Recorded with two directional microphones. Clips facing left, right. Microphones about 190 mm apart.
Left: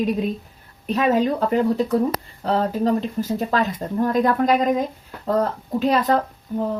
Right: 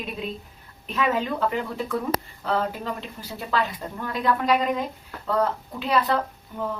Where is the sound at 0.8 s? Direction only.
40° left (ahead or behind).